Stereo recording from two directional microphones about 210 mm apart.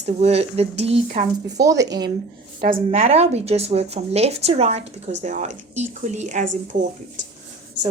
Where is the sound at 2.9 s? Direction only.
30° right (ahead or behind).